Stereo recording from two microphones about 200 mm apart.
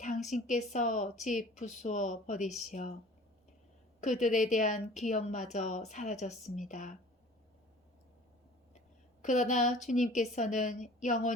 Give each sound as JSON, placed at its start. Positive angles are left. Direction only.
{"t": 0.0, "sound": "speech", "side_deg": 35}
{"t": 2.5, "sound": "speech", "side_deg": 0}
{"t": 4.2, "sound": "speech", "side_deg": 40}
{"t": 9.2, "sound": "speech", "side_deg": 40}